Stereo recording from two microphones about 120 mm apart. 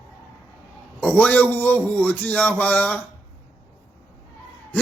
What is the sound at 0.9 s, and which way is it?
A man's voice, 15° left (ahead or behind).